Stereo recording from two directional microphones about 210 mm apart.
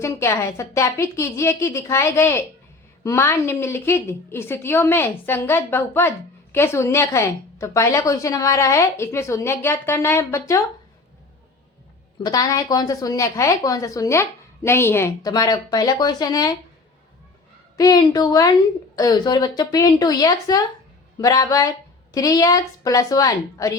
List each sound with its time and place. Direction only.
0.0 s a woman's voice: 15° left (ahead or behind)
12.2 s a woman's voice: 15° left (ahead or behind)
17.7 s a woman's voice: 20° left (ahead or behind)